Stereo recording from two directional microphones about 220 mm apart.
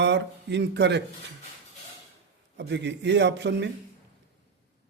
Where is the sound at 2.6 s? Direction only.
55° right (ahead or behind).